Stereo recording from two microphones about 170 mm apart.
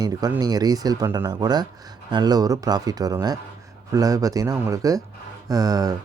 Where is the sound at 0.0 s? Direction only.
20° right (ahead or behind).